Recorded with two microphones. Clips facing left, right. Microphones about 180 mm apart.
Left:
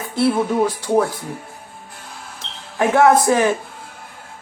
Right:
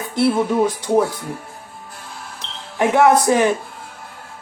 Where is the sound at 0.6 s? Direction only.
15° right (ahead or behind).